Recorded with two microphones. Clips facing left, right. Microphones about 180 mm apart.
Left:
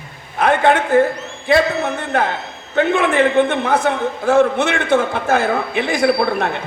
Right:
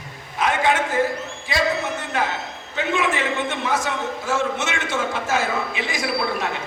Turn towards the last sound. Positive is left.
turn(degrees=60)  # may be behind; listen again after turning